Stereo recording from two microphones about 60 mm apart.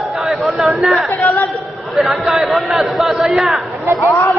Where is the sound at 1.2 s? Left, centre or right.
Left.